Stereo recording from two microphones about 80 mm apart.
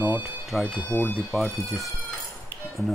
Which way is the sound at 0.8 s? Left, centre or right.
Left.